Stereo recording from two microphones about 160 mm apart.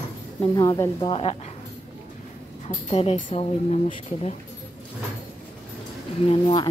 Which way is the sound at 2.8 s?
40° left (ahead or behind).